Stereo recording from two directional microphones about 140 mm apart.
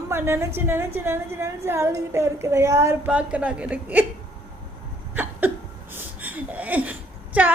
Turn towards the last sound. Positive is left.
turn(degrees=-10)  # may be behind; listen again after turning